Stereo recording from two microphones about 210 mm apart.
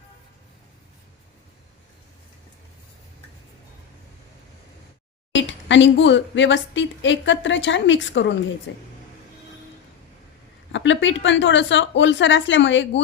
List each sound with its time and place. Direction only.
5.3 s speech: 60° left (ahead or behind)
10.7 s speech: 60° left (ahead or behind)